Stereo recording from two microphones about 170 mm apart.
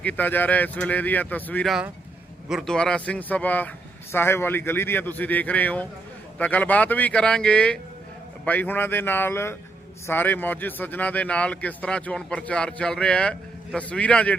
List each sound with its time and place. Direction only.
0.0 s a man's voice: 10° left (ahead or behind)